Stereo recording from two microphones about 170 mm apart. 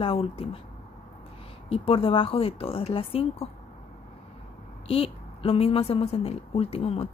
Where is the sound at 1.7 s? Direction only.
35° left (ahead or behind).